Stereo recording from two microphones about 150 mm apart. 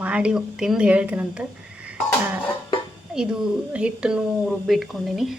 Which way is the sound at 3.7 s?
5° right (ahead or behind).